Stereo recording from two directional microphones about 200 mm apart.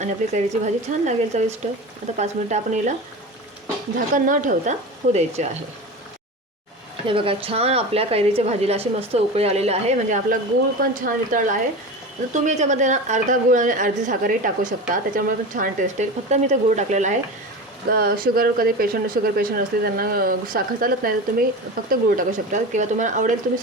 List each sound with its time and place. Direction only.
0.0 s a woman's voice: 35° right (ahead or behind)
4.1 s a woman's voice: 40° right (ahead or behind)
7.1 s a woman's voice: 25° right (ahead or behind)
17.9 s a woman's voice: 50° right (ahead or behind)